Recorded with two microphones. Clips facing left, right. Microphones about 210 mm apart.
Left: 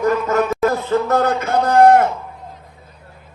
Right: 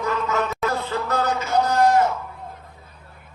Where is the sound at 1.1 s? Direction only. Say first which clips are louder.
Left 5 dB; 60° left (ahead or behind).